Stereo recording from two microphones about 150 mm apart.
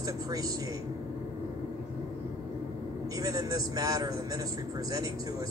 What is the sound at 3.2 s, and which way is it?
A man's voice, 25° right (ahead or behind).